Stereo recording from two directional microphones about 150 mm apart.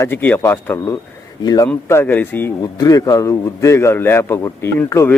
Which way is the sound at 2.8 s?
25° left (ahead or behind).